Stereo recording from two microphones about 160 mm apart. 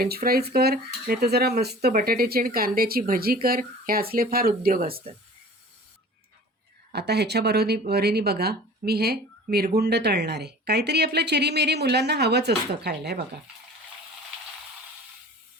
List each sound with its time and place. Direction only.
0.0 s speech: 70° right (ahead or behind)
6.9 s speech: 90° right